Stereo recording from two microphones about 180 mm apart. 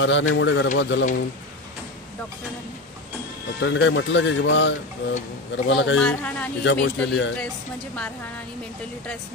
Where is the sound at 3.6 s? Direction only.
90° left.